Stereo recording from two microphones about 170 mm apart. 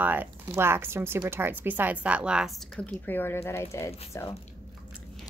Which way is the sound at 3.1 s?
15° left (ahead or behind).